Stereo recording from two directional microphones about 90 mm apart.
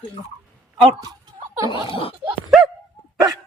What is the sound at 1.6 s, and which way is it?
Speech, 80° left.